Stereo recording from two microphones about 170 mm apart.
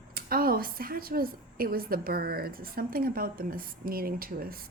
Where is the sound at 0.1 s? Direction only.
60° right (ahead or behind).